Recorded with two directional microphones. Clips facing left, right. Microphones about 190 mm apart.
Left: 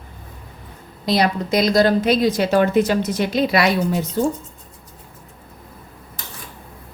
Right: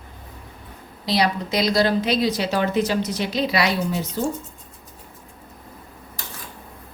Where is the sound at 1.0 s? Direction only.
50° left (ahead or behind).